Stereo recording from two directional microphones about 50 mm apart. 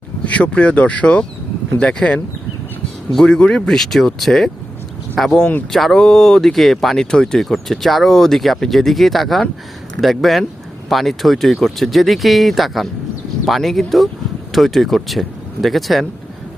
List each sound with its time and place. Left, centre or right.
0.3 s speech: left
3.2 s speech: centre
3.7 s speech: centre